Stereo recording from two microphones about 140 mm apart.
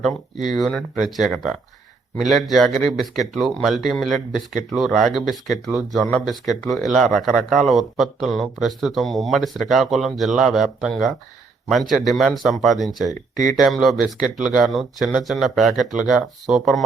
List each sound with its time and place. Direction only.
0.0 s speech: centre (ahead or behind)
13.3 s speech: 65° right (ahead or behind)
13.6 s speech: centre (ahead or behind)